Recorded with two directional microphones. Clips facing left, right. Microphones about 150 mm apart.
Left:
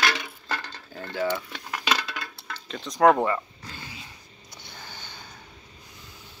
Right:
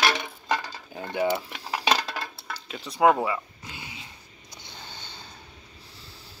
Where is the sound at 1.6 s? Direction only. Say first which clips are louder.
Right 3 dB; 30° right (ahead or behind).